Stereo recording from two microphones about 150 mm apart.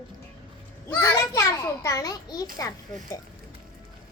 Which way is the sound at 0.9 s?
15° left (ahead or behind).